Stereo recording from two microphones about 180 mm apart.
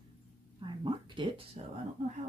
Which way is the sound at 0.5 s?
25° right (ahead or behind).